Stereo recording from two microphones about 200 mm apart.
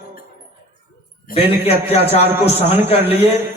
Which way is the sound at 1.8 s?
30° left (ahead or behind).